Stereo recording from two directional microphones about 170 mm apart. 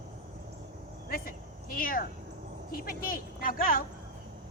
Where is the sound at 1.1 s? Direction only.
55° left (ahead or behind).